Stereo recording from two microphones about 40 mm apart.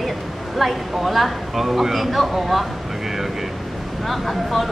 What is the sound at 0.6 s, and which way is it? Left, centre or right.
A woman's voice, centre.